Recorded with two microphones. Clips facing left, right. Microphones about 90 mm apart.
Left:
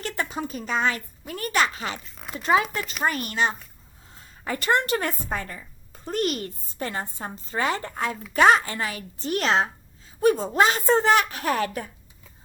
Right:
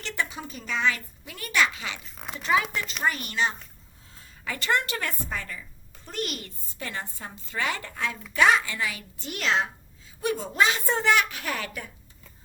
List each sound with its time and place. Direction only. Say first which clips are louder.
0.0 s a woman's voice: left 3 dB; 45° left (ahead or behind)
2.0 s speech: left 2 dB; centre (ahead or behind)
2.4 s a woman's voice: left 3 dB; 35° left (ahead or behind)
4.9 s a woman's voice: left 5 dB; 20° left (ahead or behind)
5.3 s a woman's voice: left 4 dB; 35° left (ahead or behind)